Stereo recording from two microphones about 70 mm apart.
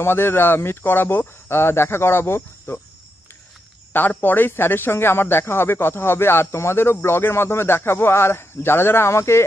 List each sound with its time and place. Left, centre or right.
0.0 s speech: left
3.9 s speech: left